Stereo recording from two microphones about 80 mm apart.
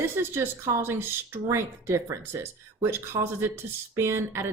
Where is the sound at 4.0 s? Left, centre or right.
Right.